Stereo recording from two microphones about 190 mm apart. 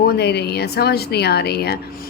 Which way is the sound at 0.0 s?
60° left (ahead or behind).